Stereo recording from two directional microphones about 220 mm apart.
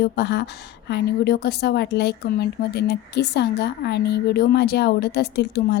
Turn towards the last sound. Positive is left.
turn(degrees=50)  # may be behind; listen again after turning